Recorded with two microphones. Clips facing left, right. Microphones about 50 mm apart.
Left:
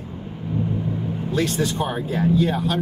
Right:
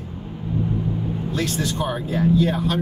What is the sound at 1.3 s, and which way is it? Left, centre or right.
Speech, left.